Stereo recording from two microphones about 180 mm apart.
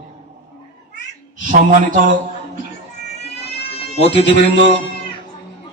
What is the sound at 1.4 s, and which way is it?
Speech, 45° right (ahead or behind).